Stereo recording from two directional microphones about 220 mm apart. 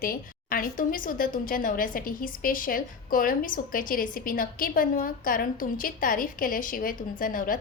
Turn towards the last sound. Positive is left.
turn(degrees=40)  # may be behind; listen again after turning